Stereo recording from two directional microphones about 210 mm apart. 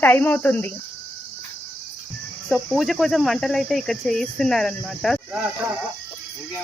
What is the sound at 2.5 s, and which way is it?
Speech, centre (ahead or behind).